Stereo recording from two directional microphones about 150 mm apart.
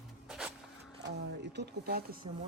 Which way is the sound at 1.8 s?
90° right.